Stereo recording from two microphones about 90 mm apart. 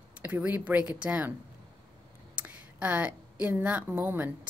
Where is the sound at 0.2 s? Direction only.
15° right (ahead or behind).